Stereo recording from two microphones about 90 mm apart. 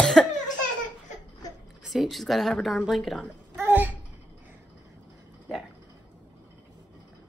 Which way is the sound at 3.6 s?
25° right (ahead or behind).